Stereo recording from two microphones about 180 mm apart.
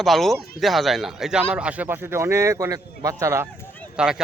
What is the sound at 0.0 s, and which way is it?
A man's voice, centre (ahead or behind).